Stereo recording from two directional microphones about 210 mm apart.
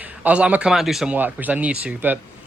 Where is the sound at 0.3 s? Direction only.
5° right (ahead or behind).